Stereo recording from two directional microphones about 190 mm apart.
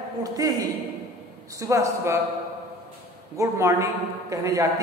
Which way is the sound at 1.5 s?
15° right (ahead or behind).